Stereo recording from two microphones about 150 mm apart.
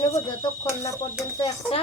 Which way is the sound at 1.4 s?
35° left (ahead or behind).